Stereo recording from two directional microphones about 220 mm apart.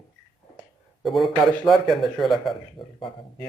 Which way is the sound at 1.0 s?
Centre (ahead or behind).